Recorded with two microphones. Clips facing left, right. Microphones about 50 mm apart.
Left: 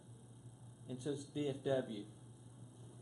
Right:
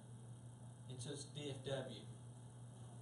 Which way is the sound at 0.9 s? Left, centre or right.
Left.